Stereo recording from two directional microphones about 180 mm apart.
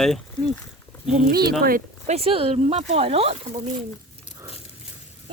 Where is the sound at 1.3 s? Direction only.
60° right (ahead or behind).